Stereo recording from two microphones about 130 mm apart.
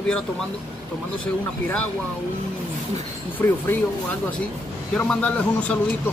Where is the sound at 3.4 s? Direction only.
15° left (ahead or behind).